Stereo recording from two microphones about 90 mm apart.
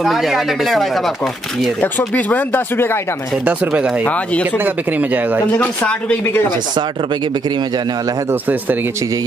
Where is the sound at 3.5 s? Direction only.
15° right (ahead or behind).